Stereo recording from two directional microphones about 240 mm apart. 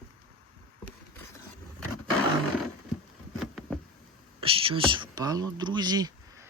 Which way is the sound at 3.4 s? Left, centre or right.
Centre.